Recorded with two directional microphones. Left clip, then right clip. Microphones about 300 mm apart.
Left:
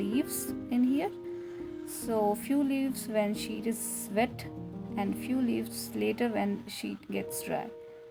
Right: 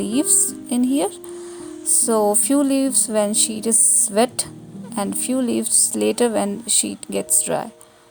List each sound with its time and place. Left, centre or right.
0.0 s a woman's voice: right